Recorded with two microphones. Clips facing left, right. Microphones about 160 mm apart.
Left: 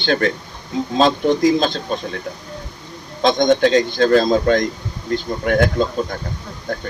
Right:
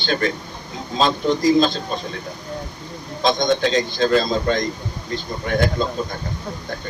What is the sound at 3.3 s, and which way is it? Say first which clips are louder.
Speech: left 7 dB; 55° left (ahead or behind).